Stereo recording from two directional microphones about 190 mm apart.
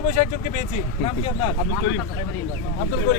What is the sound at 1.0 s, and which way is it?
Speech, 30° left (ahead or behind).